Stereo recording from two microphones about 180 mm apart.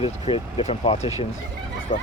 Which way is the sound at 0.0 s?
30° left (ahead or behind).